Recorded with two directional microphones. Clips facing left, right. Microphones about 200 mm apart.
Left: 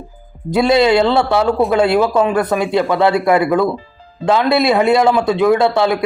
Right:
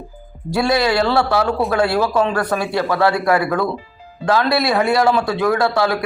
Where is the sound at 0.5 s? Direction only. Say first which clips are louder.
Left 5 dB; 20° left (ahead or behind).